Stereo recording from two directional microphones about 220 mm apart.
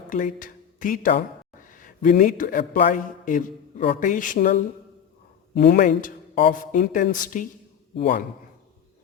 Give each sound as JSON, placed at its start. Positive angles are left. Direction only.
{"t": 0.1, "sound": "a man's voice", "side_deg": 40}